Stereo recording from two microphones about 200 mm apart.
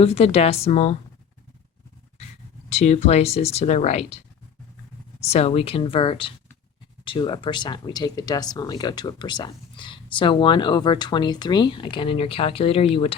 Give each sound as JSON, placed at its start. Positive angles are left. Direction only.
{"t": 0.0, "sound": "speech", "side_deg": 30}
{"t": 2.6, "sound": "speech", "side_deg": 35}
{"t": 5.3, "sound": "speech", "side_deg": 30}